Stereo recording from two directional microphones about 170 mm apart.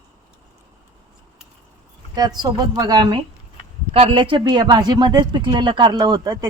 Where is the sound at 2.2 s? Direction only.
25° right (ahead or behind).